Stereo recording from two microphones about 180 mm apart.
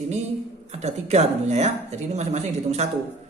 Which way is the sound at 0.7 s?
40° right (ahead or behind).